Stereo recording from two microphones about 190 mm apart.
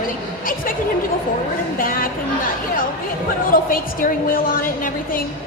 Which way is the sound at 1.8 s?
50° left (ahead or behind).